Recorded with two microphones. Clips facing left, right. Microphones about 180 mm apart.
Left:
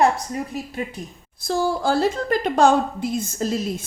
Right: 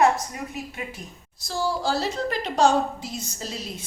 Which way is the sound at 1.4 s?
55° left (ahead or behind).